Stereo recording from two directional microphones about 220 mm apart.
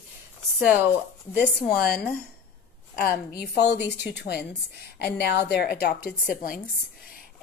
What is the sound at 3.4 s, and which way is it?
A woman's voice, 50° left (ahead or behind).